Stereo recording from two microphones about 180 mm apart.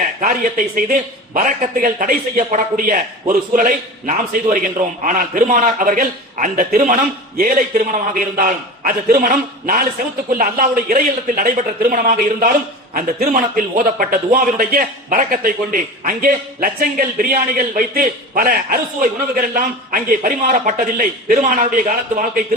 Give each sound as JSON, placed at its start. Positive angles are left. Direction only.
{"t": 0.2, "sound": "a man's voice", "side_deg": -50}